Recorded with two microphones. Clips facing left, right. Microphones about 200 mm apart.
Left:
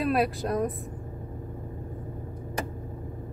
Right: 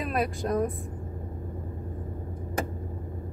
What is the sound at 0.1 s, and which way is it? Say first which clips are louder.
Speech: left 3 dB; 5° left (ahead or behind).